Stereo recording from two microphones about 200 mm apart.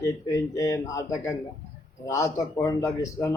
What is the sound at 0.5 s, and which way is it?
A man's voice, 15° left (ahead or behind).